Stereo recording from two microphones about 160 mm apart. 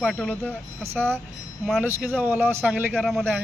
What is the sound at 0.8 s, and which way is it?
A man's voice, 15° right (ahead or behind).